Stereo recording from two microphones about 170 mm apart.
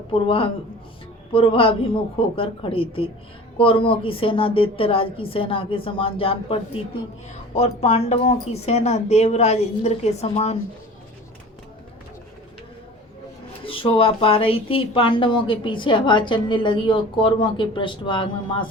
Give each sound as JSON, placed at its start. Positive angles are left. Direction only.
{"t": 0.1, "sound": "speech", "side_deg": 30}
{"t": 13.7, "sound": "speech", "side_deg": 30}